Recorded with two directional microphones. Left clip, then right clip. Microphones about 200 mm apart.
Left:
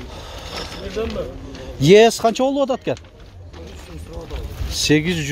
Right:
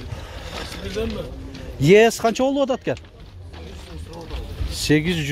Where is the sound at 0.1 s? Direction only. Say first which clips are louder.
Left 3 dB; 10° left (ahead or behind).